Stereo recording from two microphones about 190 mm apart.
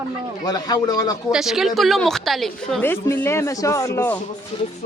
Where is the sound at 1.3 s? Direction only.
5° right (ahead or behind); by 4.2 s 15° left (ahead or behind).